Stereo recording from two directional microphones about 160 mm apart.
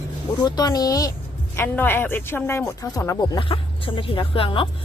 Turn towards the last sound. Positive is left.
turn(degrees=35)  # may be behind; listen again after turning